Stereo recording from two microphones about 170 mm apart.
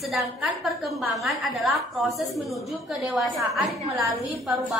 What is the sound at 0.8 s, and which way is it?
A woman's voice, centre (ahead or behind).